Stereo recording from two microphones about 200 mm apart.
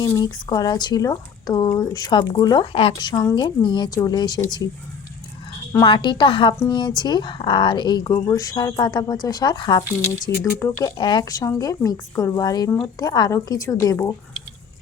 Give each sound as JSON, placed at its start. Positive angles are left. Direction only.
{"t": 0.0, "sound": "speech", "side_deg": 20}
{"t": 5.7, "sound": "a woman's voice", "side_deg": 25}